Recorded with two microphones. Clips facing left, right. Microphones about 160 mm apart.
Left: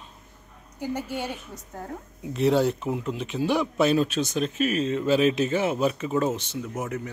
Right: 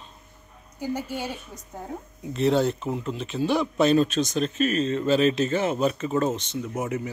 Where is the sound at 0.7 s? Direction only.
10° right (ahead or behind).